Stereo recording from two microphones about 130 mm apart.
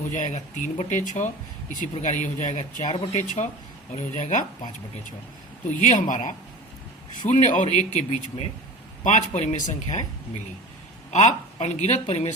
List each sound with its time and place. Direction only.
0.1 s speech: 70° left (ahead or behind)
5.6 s speech: 70° left (ahead or behind)